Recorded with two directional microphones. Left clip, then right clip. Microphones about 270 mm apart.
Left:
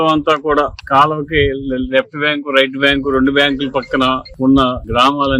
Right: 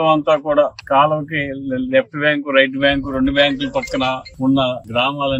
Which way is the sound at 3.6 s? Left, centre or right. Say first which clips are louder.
Left 4 dB; left.